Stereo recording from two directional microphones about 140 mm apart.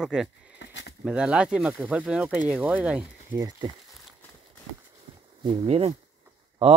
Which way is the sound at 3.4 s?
30° right (ahead or behind).